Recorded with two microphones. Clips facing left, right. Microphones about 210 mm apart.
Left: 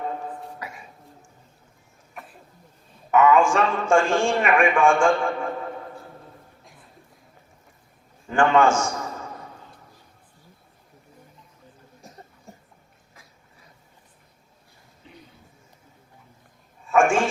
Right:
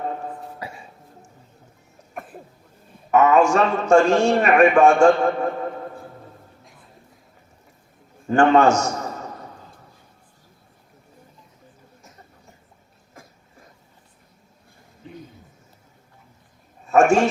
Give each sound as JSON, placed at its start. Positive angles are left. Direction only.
{"t": 0.6, "sound": "cough", "side_deg": -30}
{"t": 3.1, "sound": "a man's voice", "side_deg": -40}
{"t": 8.3, "sound": "a man's voice", "side_deg": -40}
{"t": 16.8, "sound": "a sound", "side_deg": -40}